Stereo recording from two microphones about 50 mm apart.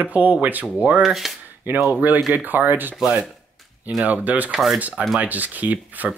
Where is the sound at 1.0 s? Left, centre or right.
Centre.